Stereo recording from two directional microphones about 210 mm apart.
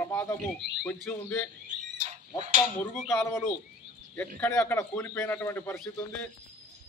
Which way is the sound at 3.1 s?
10° left (ahead or behind).